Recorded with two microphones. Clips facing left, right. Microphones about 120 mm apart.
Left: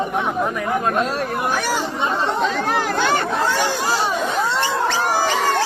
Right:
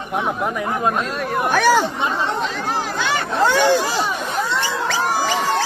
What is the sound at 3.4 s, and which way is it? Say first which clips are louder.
Speech: right 5 dB; 80° right.